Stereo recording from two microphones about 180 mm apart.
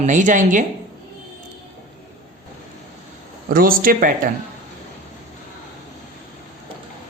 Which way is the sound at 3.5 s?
50° right (ahead or behind).